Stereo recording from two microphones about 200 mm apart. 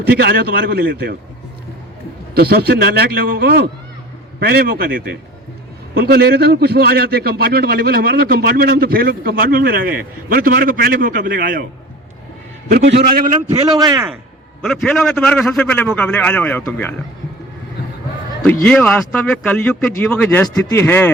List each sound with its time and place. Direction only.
0.1 s a man's voice: 50° right (ahead or behind)
2.3 s a man's voice: 50° right (ahead or behind)
12.6 s a man's voice: 50° right (ahead or behind)
13.7 s a man's voice: 20° right (ahead or behind)
14.6 s a man's voice: centre (ahead or behind)
18.6 s a man's voice: 5° left (ahead or behind)